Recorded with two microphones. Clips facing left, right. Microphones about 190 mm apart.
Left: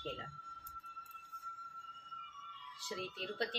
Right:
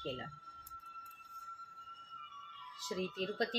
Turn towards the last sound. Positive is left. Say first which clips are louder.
# right 4 dB
turn(degrees=-40)  # may be behind; listen again after turning